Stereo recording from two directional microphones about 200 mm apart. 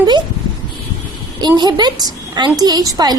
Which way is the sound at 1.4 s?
20° right (ahead or behind).